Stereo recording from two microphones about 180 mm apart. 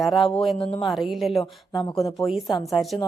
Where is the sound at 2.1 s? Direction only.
Centre (ahead or behind).